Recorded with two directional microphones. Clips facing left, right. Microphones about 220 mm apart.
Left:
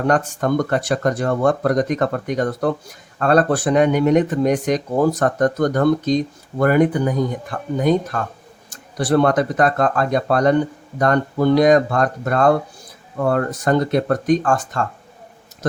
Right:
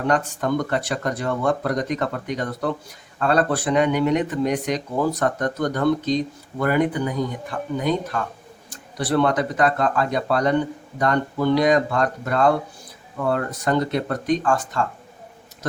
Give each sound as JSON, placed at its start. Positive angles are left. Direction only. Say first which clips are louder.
{"t": 0.1, "sound": "speech", "louder": "left 2 dB", "side_deg": 45}